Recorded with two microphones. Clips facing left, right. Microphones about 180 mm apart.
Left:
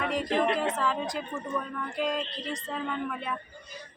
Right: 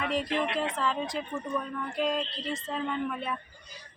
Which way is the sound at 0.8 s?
Centre (ahead or behind).